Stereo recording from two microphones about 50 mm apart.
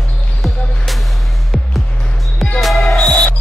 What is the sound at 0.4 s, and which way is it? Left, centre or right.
Music, centre.